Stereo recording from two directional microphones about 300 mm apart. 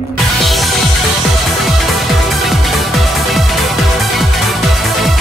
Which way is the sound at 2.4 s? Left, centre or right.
Centre.